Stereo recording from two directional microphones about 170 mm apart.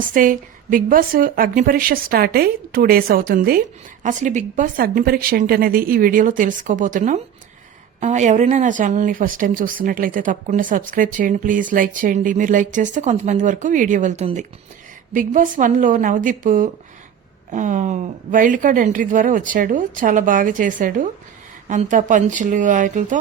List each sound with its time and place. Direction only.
0.1 s a woman's voice: 55° right (ahead or behind)
4.0 s speech: 45° right (ahead or behind)